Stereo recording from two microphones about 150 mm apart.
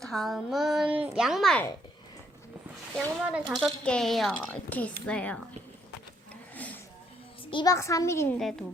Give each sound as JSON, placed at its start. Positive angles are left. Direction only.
{"t": 0.0, "sound": "a child's voice", "side_deg": 0}
{"t": 3.3, "sound": "a child's voice", "side_deg": 0}
{"t": 6.5, "sound": "music", "side_deg": 10}
{"t": 7.5, "sound": "a child's voice", "side_deg": 25}
{"t": 8.4, "sound": "a child's voice", "side_deg": 0}